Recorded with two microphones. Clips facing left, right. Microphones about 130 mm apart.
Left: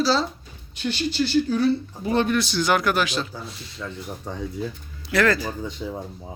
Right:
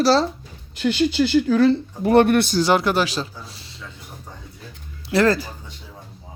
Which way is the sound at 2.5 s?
30° right (ahead or behind).